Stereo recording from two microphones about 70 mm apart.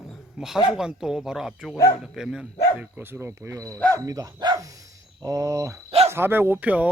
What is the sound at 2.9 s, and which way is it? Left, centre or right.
Speech, right.